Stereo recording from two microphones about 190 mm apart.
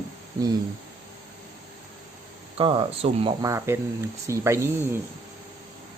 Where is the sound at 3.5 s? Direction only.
15° right (ahead or behind).